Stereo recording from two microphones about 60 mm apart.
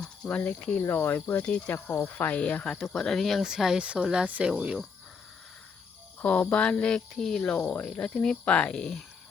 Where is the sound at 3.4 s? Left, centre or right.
Centre.